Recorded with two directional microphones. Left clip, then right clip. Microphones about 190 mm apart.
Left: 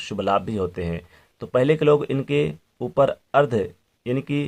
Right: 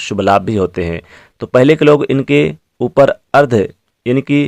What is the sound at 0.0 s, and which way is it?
Speech, 35° right (ahead or behind).